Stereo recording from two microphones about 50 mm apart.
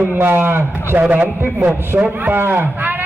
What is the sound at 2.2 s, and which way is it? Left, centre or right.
Speech, right.